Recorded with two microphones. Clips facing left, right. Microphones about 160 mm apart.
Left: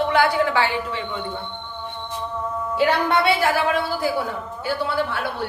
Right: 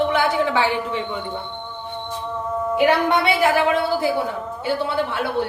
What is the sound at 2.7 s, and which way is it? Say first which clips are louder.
A woman's voice: right 2 dB; 20° right (ahead or behind).